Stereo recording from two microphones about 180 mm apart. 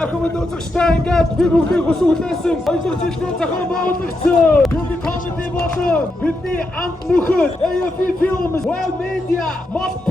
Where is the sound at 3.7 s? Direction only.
55° left (ahead or behind).